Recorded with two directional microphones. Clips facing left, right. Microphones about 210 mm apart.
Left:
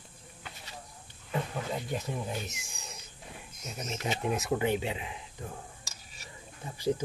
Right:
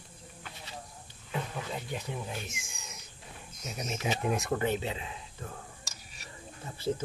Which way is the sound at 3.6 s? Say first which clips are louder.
Right 1 dB; 5° right (ahead or behind).